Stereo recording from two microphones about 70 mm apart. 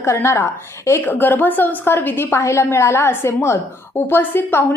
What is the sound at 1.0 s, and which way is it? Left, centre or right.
A woman's voice, left.